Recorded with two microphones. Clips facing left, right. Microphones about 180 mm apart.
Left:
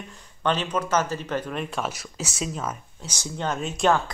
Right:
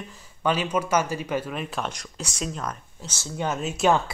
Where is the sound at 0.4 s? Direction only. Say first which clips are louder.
Right 1 dB; 10° right (ahead or behind); by 3.3 s 10° left (ahead or behind).